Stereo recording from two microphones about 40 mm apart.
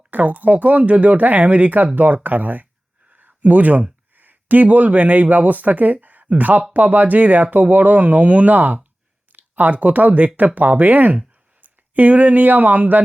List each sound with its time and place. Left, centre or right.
0.1 s speech: right
3.1 s a sound: right
4.1 s speech: right